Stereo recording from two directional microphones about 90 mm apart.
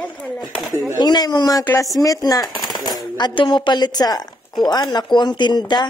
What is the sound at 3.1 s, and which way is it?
Speech, 60° left (ahead or behind).